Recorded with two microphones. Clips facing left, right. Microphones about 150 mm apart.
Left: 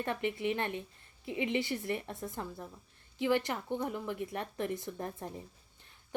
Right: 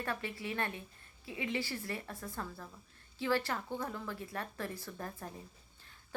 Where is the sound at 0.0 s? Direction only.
20° left (ahead or behind).